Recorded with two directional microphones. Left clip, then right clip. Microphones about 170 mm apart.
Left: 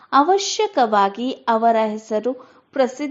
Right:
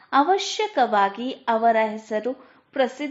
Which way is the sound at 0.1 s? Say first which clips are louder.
Left 4 dB; 35° left (ahead or behind).